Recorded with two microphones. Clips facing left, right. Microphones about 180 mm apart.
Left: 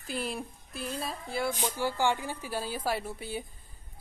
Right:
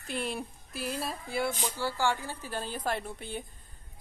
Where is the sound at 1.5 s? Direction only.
15° left (ahead or behind).